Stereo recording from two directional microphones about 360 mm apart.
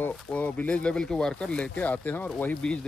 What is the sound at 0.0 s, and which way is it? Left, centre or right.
Speech, centre.